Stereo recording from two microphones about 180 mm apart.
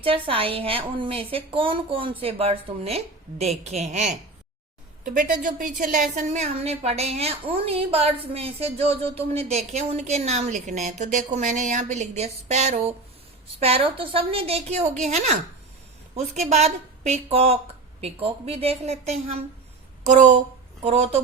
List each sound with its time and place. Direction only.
0.0 s a woman's voice: 30° right (ahead or behind)
5.1 s a woman's voice: 50° right (ahead or behind)
20.8 s a woman's voice: 35° right (ahead or behind)